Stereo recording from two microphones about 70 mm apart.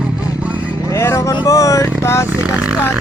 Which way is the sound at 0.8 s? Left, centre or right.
Left.